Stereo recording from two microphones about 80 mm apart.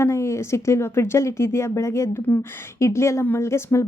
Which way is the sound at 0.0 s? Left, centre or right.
Left.